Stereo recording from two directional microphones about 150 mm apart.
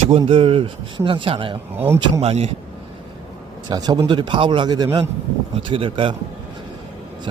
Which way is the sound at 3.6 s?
25° right (ahead or behind).